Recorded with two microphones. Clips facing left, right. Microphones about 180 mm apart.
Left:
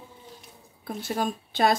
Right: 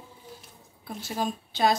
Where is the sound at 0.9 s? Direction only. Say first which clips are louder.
Left 2 dB; 55° left (ahead or behind).